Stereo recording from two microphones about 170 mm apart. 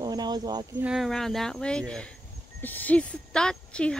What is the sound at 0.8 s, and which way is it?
Speech, centre (ahead or behind).